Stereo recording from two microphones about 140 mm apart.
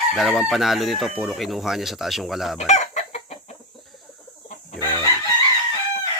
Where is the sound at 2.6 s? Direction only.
55° left (ahead or behind).